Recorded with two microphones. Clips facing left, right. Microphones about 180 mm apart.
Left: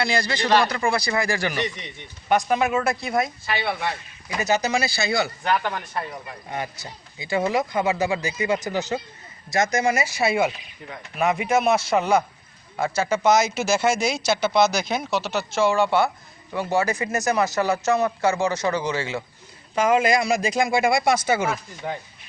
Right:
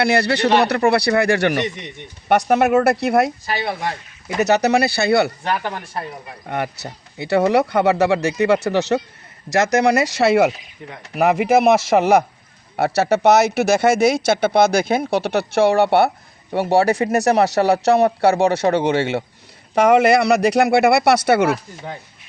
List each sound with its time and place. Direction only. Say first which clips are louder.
0.0 s speech: right 7 dB; 70° right (ahead or behind)
3.4 s speech: right 3 dB; 40° right (ahead or behind)
4.4 s speech: right 7 dB; 70° right (ahead or behind)
5.4 s speech: right 1 dB; 30° right (ahead or behind)
6.5 s speech: right 7 dB; 65° right (ahead or behind)